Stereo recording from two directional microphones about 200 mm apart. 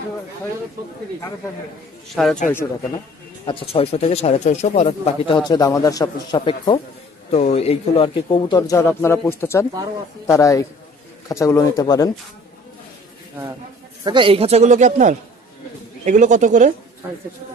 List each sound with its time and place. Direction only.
2.2 s speech: centre (ahead or behind)
3.4 s speech: 25° left (ahead or behind)
5.4 s speech: 20° left (ahead or behind)
14.0 s speech: 25° right (ahead or behind)